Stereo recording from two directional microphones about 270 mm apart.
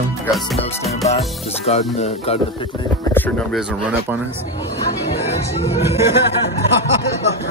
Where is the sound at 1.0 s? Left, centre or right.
Left.